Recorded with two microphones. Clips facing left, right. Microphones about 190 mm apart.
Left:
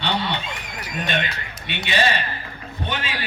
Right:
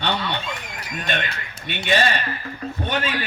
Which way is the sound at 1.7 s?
45° right (ahead or behind).